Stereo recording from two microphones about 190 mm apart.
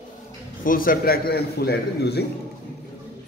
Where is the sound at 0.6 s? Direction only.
50° left (ahead or behind).